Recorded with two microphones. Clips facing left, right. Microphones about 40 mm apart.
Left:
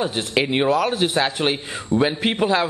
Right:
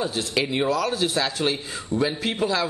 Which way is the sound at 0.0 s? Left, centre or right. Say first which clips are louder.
Left 3 dB; left.